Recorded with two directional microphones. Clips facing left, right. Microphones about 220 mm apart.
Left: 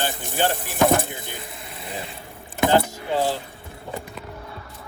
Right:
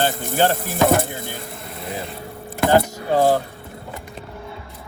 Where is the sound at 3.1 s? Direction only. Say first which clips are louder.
Right 7 dB; 45° right (ahead or behind).